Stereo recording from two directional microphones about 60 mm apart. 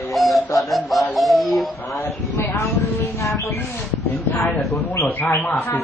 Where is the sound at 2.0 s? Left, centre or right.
Left.